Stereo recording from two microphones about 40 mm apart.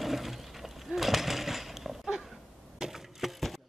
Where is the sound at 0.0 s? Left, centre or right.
Centre.